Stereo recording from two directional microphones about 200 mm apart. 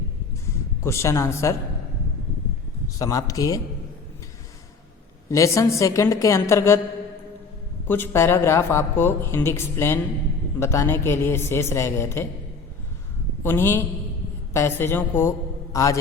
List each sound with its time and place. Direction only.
0.9 s speech: 15° left (ahead or behind)
3.0 s speech: 15° left (ahead or behind)
5.3 s speech: 15° left (ahead or behind)
7.9 s speech: 10° left (ahead or behind)
13.4 s a man's voice: 10° left (ahead or behind)